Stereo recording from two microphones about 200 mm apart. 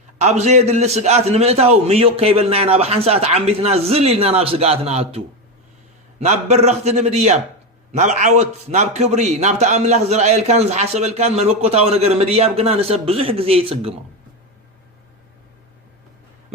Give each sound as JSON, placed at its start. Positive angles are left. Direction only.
{"t": 0.2, "sound": "a man's voice", "side_deg": -35}